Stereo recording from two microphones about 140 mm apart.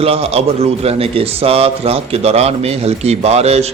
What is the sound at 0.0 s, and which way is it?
A man's voice, 45° right (ahead or behind).